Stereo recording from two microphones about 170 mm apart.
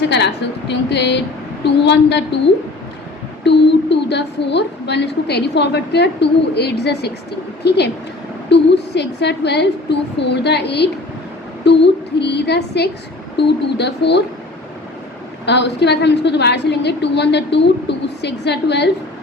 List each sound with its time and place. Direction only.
0.1 s a woman's voice: 85° left
3.4 s speech: 90° left
8.4 s a woman's voice: 90° left
15.4 s a woman's voice: 90° left